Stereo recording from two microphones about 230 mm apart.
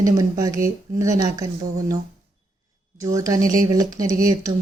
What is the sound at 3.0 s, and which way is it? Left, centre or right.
Speech, centre.